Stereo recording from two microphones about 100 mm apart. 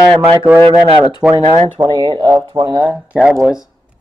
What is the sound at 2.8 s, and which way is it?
Speech, 15° right (ahead or behind).